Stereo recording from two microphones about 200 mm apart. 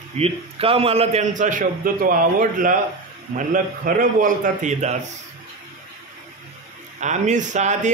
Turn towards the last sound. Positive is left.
turn(degrees=-35)  # may be behind; listen again after turning